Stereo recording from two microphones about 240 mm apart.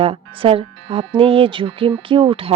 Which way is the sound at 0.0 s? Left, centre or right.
Right.